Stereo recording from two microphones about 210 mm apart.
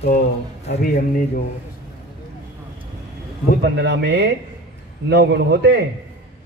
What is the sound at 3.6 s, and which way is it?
A man's voice, 55° right (ahead or behind).